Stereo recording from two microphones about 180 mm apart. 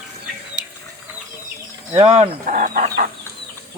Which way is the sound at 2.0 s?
35° right (ahead or behind).